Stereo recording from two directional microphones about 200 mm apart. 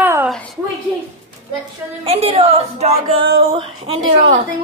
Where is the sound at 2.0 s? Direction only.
30° right (ahead or behind).